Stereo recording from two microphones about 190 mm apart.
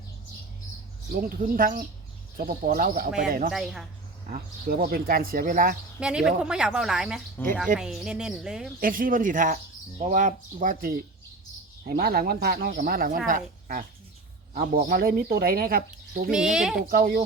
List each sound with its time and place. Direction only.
1.1 s speech: 50° right (ahead or behind)
3.5 s speech: centre (ahead or behind)
4.3 s speech: 50° right (ahead or behind)
6.0 s speech: 5° right (ahead or behind)
7.4 s speech: 10° left (ahead or behind)
7.8 s speech: centre (ahead or behind)
8.8 s speech: 45° right (ahead or behind)
16.3 s speech: 5° right (ahead or behind)
16.7 s speech: 50° right (ahead or behind)